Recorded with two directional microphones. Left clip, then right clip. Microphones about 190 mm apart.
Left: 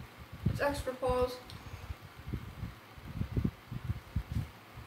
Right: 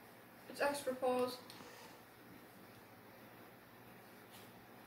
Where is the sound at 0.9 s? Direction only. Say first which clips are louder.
Left 3 dB; 5° right (ahead or behind).